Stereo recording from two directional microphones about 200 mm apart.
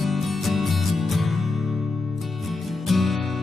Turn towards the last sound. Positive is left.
turn(degrees=0)  # may be behind; listen again after turning